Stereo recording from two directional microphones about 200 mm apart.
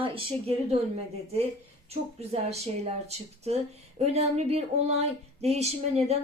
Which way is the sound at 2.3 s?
30° right (ahead or behind).